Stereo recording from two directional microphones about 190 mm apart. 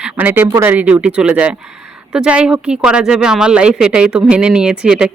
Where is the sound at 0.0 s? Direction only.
10° right (ahead or behind).